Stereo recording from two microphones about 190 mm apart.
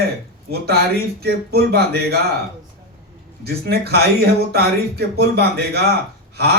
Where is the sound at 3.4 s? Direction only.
55° right (ahead or behind).